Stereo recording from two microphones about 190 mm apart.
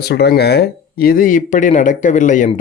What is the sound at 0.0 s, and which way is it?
Speech, 60° left (ahead or behind).